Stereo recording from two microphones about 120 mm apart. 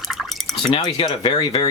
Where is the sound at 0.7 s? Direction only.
45° left (ahead or behind).